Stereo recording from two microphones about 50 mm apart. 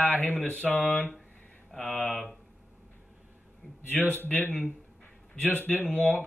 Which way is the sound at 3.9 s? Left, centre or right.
Left.